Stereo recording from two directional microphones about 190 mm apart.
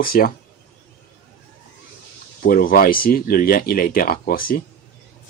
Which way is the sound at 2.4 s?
50° left (ahead or behind).